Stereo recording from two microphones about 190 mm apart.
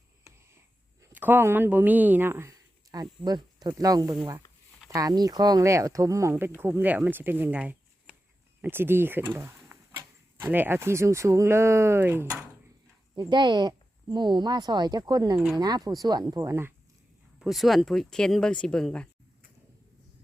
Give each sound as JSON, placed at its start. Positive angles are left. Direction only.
{"t": 1.0, "sound": "speech", "side_deg": -10}
{"t": 13.3, "sound": "speech", "side_deg": -25}
{"t": 17.4, "sound": "speech", "side_deg": 0}